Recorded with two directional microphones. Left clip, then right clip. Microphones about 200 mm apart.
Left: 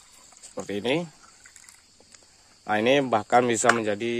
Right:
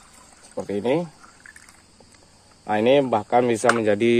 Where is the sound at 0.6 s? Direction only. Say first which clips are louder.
Right 4 dB; 25° left (ahead or behind).